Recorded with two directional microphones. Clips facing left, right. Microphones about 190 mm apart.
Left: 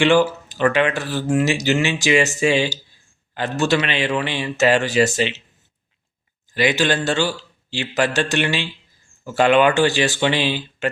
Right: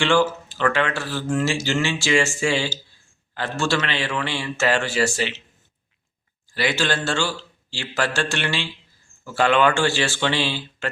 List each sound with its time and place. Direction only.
0.0 s a man's voice: 15° left (ahead or behind)
6.5 s speech: 20° left (ahead or behind)